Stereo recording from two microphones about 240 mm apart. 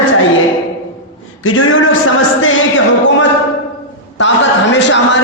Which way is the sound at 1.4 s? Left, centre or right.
Left.